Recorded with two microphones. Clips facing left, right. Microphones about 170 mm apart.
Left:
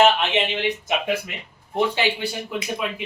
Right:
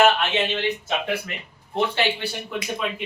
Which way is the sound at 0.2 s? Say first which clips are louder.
Left 1 dB; 15° left (ahead or behind).